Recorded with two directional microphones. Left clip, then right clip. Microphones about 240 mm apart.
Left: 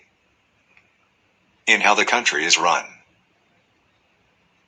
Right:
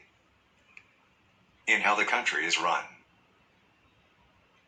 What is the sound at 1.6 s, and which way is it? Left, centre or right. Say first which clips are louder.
Speech: left 9 dB; left.